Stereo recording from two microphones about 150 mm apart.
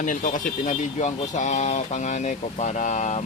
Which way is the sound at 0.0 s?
60° left (ahead or behind).